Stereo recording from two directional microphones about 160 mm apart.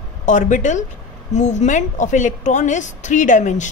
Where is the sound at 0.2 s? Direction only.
50° left (ahead or behind).